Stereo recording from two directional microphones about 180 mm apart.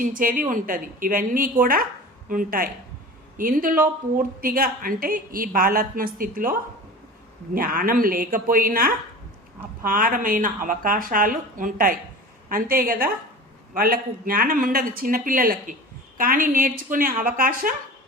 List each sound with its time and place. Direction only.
0.0 s a woman's voice: 50° right (ahead or behind)